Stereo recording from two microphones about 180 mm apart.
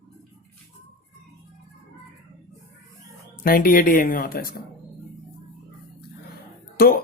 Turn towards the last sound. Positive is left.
turn(degrees=55)  # may be behind; listen again after turning